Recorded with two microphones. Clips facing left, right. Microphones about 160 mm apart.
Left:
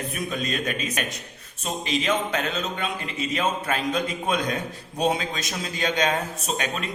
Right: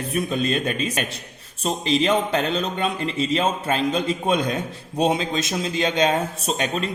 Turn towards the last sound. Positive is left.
turn(degrees=-30)  # may be behind; listen again after turning